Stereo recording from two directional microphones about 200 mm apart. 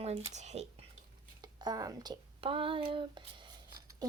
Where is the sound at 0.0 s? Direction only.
30° right (ahead or behind).